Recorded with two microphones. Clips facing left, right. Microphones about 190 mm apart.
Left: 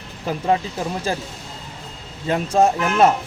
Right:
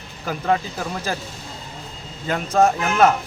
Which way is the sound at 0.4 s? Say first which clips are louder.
Left 1 dB; 25° left (ahead or behind).